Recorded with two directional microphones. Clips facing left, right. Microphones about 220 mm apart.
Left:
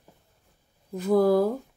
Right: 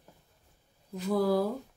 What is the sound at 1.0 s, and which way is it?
Speech, 50° left (ahead or behind).